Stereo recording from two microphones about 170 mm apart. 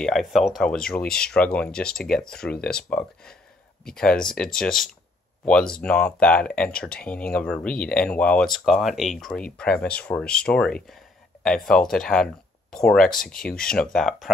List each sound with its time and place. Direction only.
0.0 s speech: centre (ahead or behind)
13.2 s speech: 55° left (ahead or behind)
13.9 s speech: 5° left (ahead or behind)